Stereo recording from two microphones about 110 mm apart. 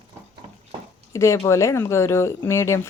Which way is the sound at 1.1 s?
25° left (ahead or behind).